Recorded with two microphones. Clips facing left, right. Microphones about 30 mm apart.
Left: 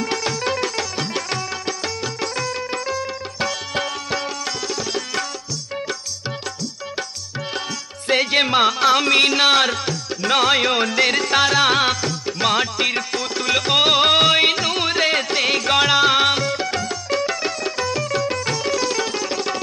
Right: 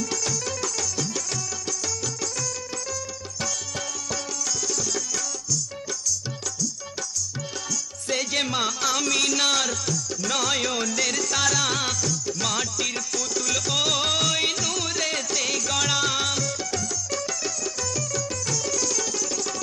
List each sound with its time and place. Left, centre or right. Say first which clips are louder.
0.0 s music: left 6 dB; left
8.1 s music: left 9 dB; left